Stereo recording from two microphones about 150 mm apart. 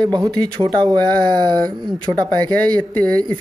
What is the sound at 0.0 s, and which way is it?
Speech, 30° right (ahead or behind).